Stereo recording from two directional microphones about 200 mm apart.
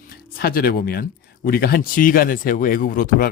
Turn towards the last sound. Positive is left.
turn(degrees=45)  # may be behind; listen again after turning